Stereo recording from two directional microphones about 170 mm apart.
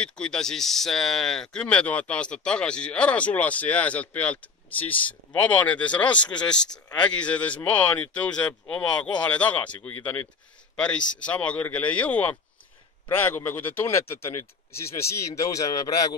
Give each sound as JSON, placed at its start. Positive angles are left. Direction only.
{"t": 0.0, "sound": "speech", "side_deg": 5}